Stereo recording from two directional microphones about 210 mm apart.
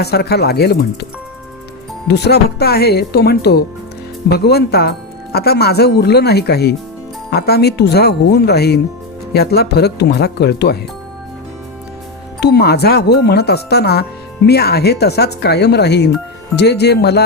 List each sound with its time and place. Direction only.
0.0 s speech: 50° left (ahead or behind)
2.0 s speech: 50° left (ahead or behind)
12.4 s speech: 50° left (ahead or behind)